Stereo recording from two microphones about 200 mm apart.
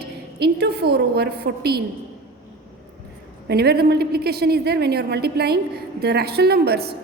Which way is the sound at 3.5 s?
50° right (ahead or behind).